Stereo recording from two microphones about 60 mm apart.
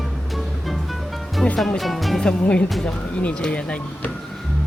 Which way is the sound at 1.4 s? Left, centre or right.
Centre.